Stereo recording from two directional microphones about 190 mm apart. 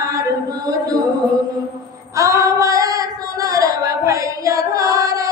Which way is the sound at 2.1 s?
15° right (ahead or behind).